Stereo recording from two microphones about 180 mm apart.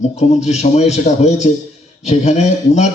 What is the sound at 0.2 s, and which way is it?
A man's voice, 40° left (ahead or behind).